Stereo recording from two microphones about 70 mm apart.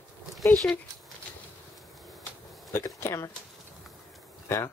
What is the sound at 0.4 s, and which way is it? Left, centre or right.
Speech, centre.